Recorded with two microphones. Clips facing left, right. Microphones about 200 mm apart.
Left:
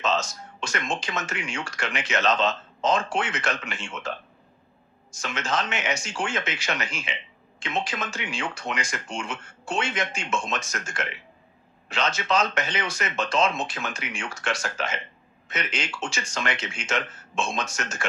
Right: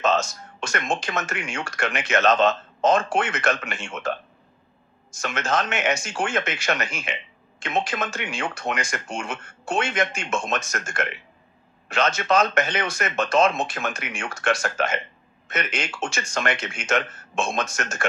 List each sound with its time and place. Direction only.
0.0 s speech: 50° right (ahead or behind)
5.2 s speech: 50° right (ahead or behind)